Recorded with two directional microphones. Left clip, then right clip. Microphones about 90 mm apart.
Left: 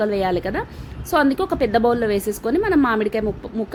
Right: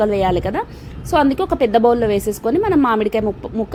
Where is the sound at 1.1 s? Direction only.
20° right (ahead or behind).